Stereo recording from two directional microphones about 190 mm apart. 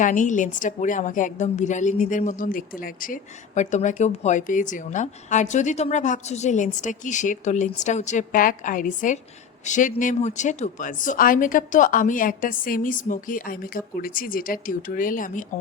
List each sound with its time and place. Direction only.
0.0 s a woman's voice: 45° left (ahead or behind)